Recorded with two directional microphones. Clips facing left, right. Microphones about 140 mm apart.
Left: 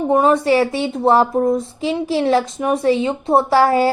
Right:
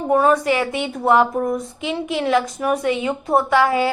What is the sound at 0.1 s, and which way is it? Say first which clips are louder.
A woman's voice: left 2 dB; 25° left (ahead or behind).